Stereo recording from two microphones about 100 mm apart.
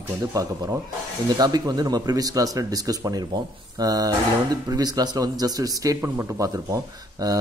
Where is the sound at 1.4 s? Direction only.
40° right (ahead or behind).